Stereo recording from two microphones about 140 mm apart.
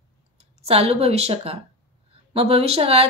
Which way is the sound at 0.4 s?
45° right (ahead or behind).